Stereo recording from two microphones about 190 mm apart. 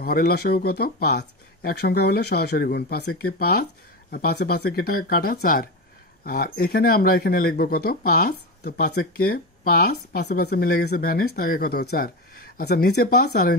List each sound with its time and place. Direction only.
0.0 s speech: 55° left (ahead or behind)